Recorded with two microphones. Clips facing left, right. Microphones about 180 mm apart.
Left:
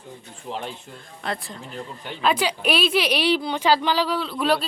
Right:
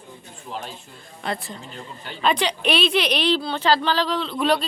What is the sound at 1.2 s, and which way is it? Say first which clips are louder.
A woman's voice: right 1 dB; centre (ahead or behind).